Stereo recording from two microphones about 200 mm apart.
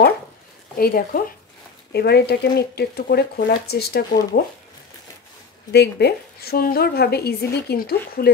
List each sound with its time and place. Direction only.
0.7 s speech: 45° left (ahead or behind)
5.7 s speech: 55° left (ahead or behind)